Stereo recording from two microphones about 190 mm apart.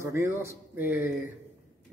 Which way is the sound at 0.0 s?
15° right (ahead or behind).